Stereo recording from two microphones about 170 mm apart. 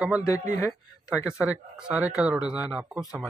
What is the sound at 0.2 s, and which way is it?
Speech, 20° left (ahead or behind).